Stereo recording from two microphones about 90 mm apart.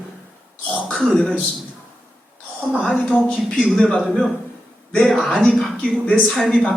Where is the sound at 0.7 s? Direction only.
10° left (ahead or behind).